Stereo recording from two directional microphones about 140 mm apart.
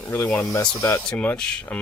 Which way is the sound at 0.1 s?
10° left (ahead or behind).